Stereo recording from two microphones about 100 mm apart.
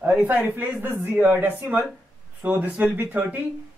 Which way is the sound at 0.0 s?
15° right (ahead or behind).